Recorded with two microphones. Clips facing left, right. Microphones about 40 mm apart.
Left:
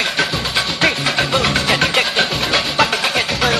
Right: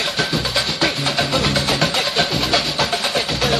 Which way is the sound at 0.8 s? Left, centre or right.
Left.